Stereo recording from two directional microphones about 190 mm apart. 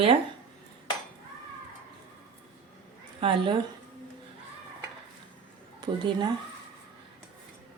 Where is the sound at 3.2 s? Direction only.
25° right (ahead or behind).